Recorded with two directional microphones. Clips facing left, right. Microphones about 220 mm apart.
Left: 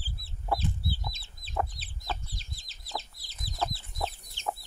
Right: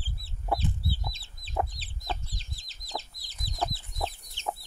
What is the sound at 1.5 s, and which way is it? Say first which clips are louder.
Chicken: right 1 dB; 20° right (ahead or behind).